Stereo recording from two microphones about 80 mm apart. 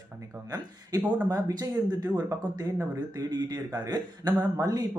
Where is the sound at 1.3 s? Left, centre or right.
Right.